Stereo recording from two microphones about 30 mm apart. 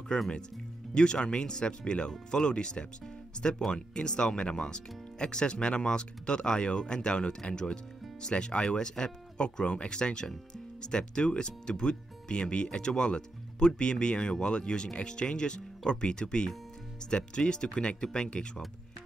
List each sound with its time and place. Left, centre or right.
0.1 s speech: left